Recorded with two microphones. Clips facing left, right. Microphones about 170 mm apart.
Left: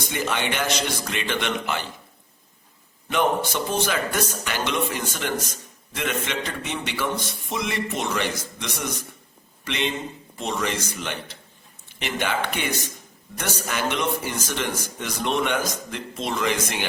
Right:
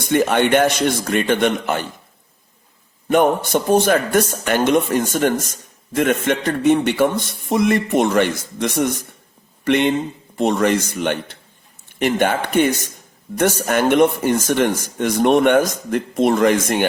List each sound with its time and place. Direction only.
0.1 s speech: 55° right (ahead or behind)
3.5 s a man's voice: 50° right (ahead or behind)